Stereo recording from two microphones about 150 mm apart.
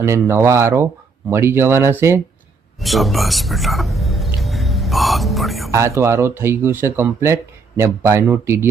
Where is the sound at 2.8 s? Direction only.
Centre (ahead or behind).